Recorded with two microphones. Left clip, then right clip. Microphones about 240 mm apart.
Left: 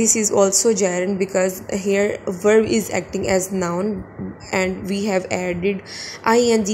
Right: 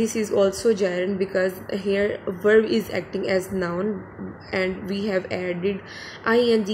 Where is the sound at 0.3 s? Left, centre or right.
Centre.